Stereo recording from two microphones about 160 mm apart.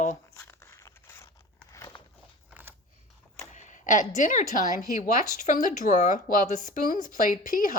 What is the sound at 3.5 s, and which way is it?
Speech, 50° left (ahead or behind).